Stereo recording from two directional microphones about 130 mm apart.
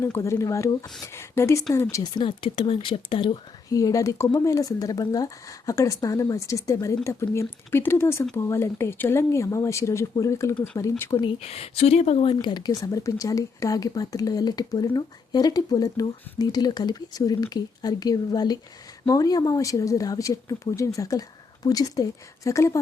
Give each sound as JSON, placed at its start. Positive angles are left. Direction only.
{"t": 0.0, "sound": "speech", "side_deg": 20}
{"t": 3.7, "sound": "speech", "side_deg": 25}
{"t": 11.2, "sound": "speech", "side_deg": 50}